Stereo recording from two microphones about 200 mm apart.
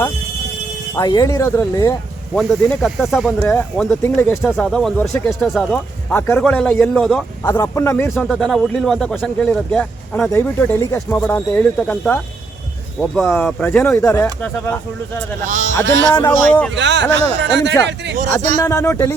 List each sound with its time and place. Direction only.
0.9 s speech: 20° left (ahead or behind)
2.3 s speech: centre (ahead or behind)
15.4 s speech: 40° right (ahead or behind)
15.7 s speech: 70° right (ahead or behind)
16.5 s speech: 5° left (ahead or behind)
16.7 s speech: 65° right (ahead or behind)
18.6 s speech: 15° left (ahead or behind)